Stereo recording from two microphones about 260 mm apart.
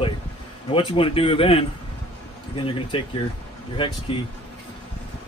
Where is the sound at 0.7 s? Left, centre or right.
Left.